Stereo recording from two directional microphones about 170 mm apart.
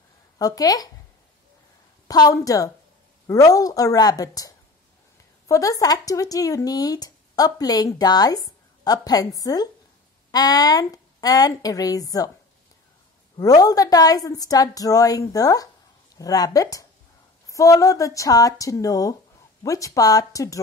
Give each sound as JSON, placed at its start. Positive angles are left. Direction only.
{"t": 0.4, "sound": "speech", "side_deg": 20}
{"t": 2.0, "sound": "speech", "side_deg": 20}
{"t": 13.4, "sound": "speech", "side_deg": 20}